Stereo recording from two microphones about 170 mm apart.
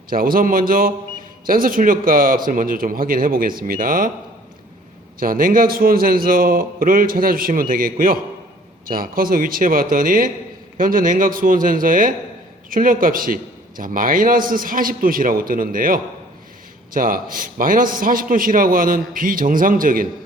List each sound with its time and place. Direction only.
0.1 s a man's voice: 55° right (ahead or behind)
5.2 s a man's voice: 55° right (ahead or behind)